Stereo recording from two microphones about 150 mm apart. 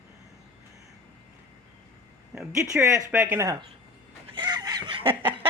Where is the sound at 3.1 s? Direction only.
10° right (ahead or behind).